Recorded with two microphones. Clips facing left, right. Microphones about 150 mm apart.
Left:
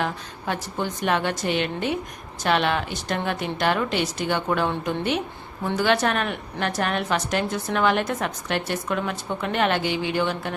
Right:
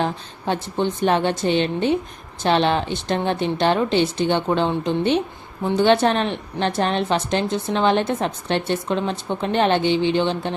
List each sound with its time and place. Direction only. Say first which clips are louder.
0.0 s a woman's voice: right 4 dB; 30° right (ahead or behind)